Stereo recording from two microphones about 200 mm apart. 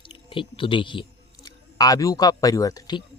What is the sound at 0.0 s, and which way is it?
Speech, 25° left (ahead or behind).